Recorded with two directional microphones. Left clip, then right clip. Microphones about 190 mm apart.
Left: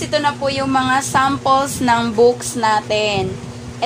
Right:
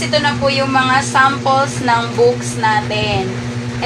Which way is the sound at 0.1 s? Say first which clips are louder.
Right 2 dB; 60° left (ahead or behind).